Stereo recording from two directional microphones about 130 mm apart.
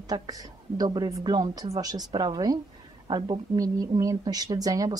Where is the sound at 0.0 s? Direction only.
30° right (ahead or behind).